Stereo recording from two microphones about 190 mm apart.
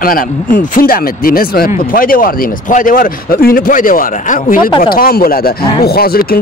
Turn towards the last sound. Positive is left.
turn(degrees=55)  # may be behind; listen again after turning